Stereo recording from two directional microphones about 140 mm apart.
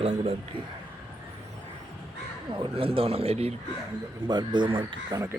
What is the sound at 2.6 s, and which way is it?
Speech, 40° right (ahead or behind).